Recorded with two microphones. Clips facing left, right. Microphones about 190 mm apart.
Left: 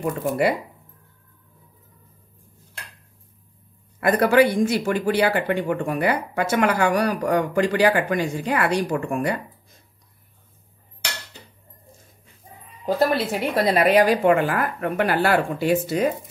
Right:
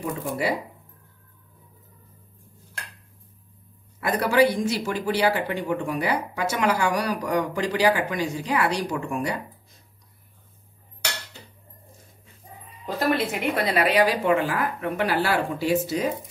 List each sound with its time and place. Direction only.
4.0 s speech: 55° left (ahead or behind)
12.8 s a woman's voice: 35° left (ahead or behind); by 16.1 s 55° left (ahead or behind)